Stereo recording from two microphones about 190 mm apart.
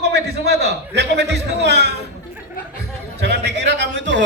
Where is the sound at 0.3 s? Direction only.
60° right (ahead or behind).